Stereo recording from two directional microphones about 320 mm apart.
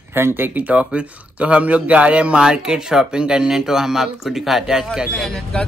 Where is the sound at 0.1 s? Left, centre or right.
Centre.